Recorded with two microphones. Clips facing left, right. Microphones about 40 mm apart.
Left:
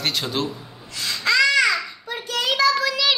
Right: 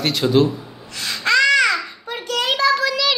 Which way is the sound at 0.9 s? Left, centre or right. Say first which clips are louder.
Right 3 dB; right.